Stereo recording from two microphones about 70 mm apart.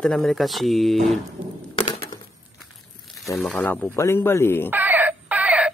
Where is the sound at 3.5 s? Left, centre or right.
Centre.